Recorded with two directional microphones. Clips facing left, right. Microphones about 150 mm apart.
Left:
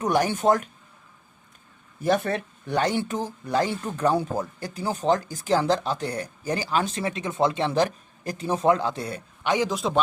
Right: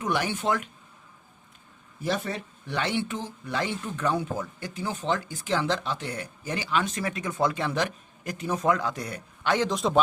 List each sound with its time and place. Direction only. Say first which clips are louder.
0.0 s speech: left 6 dB; 40° left (ahead or behind)
2.0 s speech: left 6 dB; 55° left (ahead or behind); by 9.5 s 25° left (ahead or behind)
9.5 s a man's voice: left 1 dB; 10° left (ahead or behind)
9.7 s speech: right 1 dB; centre (ahead or behind)